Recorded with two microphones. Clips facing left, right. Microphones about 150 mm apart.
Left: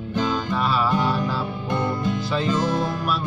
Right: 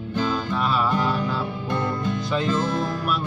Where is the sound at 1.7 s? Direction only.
20° left (ahead or behind).